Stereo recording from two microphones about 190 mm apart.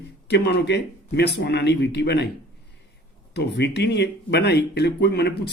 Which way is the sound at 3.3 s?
60° left (ahead or behind).